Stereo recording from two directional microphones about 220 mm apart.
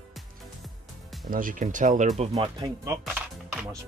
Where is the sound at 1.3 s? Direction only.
40° right (ahead or behind).